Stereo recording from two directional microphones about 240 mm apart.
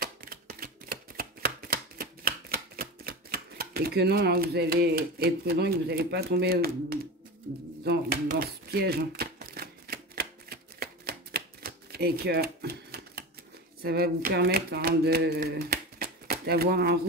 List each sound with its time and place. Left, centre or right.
0.0 s a sound: right
7.8 s shuffling cards: right
13.8 s speech: right